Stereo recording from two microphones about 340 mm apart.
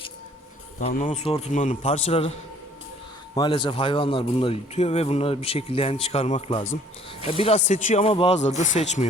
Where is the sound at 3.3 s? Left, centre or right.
Centre.